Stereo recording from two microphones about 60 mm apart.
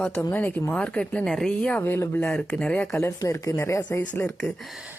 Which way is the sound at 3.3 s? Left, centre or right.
Left.